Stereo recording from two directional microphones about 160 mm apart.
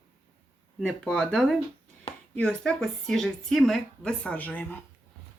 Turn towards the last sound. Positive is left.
turn(degrees=10)  # may be behind; listen again after turning